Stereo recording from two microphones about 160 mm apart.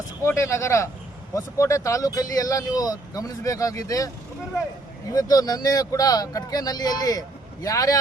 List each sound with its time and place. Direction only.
0.3 s speech: 20° left (ahead or behind)